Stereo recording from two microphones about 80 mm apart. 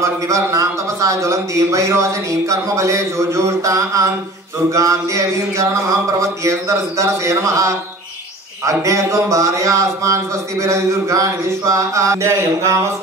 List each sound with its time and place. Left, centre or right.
0.0 s a man's voice: right